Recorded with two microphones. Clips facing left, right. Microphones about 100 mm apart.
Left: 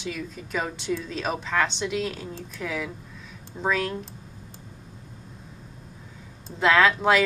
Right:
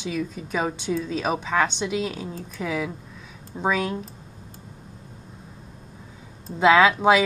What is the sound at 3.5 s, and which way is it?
Speech, 20° right (ahead or behind).